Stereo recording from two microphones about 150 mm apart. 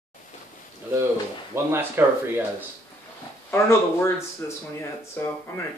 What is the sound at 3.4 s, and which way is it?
Speech, 15° left (ahead or behind).